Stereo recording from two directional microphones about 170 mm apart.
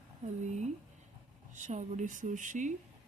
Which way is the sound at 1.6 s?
45° right (ahead or behind).